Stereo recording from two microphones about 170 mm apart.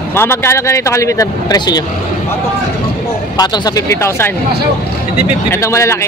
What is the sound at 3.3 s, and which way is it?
Speech, 25° left (ahead or behind).